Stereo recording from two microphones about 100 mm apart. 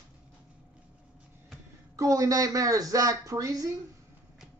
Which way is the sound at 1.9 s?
35° right (ahead or behind).